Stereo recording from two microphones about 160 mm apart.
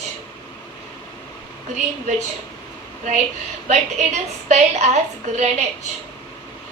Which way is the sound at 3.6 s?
45° right (ahead or behind).